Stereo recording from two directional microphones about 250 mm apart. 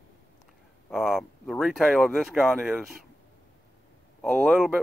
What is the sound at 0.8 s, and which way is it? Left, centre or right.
Speech, centre.